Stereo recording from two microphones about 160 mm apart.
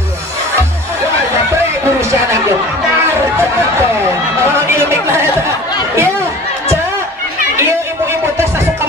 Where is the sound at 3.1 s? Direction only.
15° right (ahead or behind).